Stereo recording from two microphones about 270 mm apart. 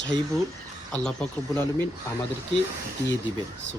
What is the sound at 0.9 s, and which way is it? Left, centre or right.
Speech, centre.